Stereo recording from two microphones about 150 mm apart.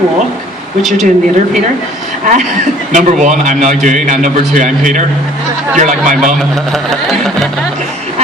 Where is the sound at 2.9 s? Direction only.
55° right (ahead or behind).